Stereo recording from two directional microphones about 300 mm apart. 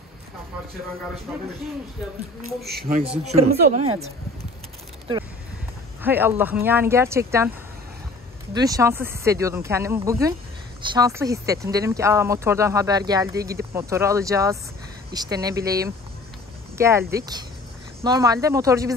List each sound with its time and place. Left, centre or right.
2.6 s speech: right
3.4 s speech: right
3.7 s speech: right
6.0 s speech: centre
8.5 s speech: centre